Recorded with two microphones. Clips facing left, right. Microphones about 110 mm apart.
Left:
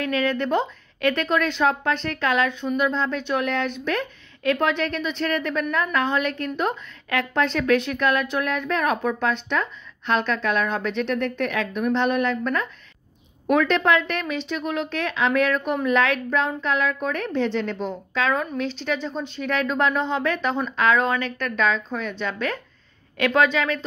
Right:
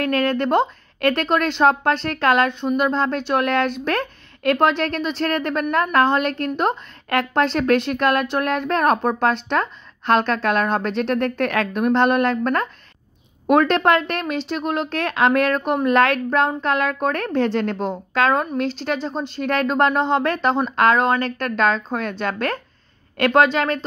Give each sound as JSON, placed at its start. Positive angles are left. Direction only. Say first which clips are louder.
{"t": 0.0, "sound": "a woman's voice", "louder": "right 3 dB", "side_deg": -55}
{"t": 4.6, "sound": "a woman's voice", "louder": "right 4 dB", "side_deg": -45}
{"t": 8.6, "sound": "a woman's voice", "louder": "right 5 dB", "side_deg": -50}
{"t": 9.0, "sound": "a woman's voice", "louder": "right 4 dB", "side_deg": -35}
{"t": 9.6, "sound": "a woman's voice", "louder": "right 4 dB", "side_deg": -55}
{"t": 11.9, "sound": "a woman's voice", "louder": "right 5 dB", "side_deg": -50}
{"t": 19.3, "sound": "a woman's voice", "louder": "right 4 dB", "side_deg": -45}